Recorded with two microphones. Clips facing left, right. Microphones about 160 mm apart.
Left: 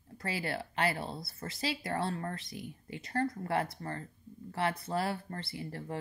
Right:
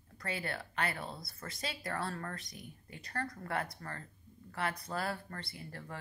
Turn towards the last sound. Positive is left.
turn(degrees=25)  # may be behind; listen again after turning